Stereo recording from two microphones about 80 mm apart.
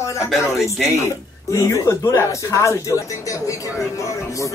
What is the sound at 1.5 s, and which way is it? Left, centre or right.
Speech, left.